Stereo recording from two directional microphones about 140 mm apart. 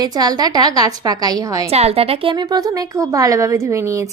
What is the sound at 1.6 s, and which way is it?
Speech, 50° right (ahead or behind).